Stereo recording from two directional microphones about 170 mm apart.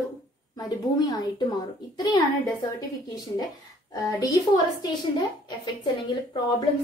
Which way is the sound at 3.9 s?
20° left (ahead or behind).